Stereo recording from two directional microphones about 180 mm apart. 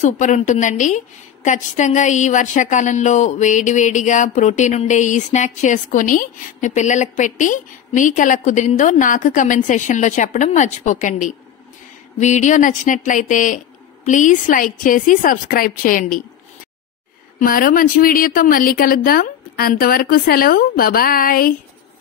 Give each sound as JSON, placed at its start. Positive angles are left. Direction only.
{"t": 0.0, "sound": "a woman's voice", "side_deg": 40}
{"t": 17.4, "sound": "a woman's voice", "side_deg": 55}